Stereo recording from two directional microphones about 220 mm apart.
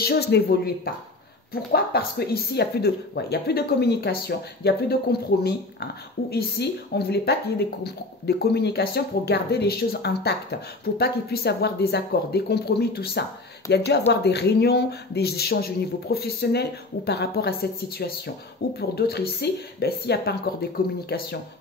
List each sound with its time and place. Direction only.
0.0 s speech: 45° left (ahead or behind)
6.3 s speech: 45° left (ahead or behind)